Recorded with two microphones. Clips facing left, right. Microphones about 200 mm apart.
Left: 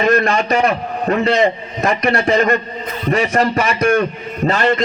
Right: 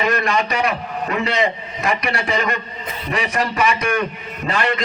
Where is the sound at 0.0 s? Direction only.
45° left (ahead or behind).